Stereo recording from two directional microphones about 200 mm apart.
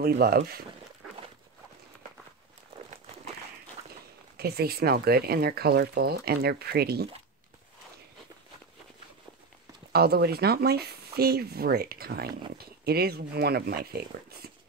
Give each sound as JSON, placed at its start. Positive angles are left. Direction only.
{"t": 0.0, "sound": "speech", "side_deg": -50}
{"t": 4.4, "sound": "speech", "side_deg": -50}
{"t": 9.9, "sound": "speech", "side_deg": -50}